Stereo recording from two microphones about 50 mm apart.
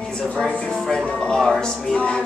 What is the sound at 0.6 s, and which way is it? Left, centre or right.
Speech, centre.